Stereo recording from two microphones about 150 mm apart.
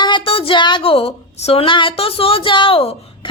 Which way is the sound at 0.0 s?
35° left (ahead or behind).